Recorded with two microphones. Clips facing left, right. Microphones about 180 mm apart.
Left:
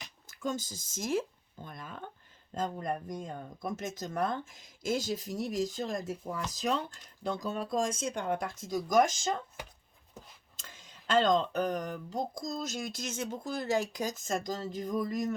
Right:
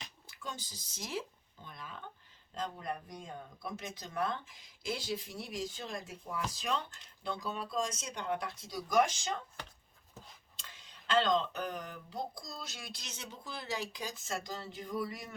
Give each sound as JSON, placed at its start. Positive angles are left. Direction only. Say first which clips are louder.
{"t": 0.3, "sound": "speech", "louder": "left 11 dB", "side_deg": 45}
{"t": 10.6, "sound": "speech", "louder": "left 4 dB", "side_deg": 45}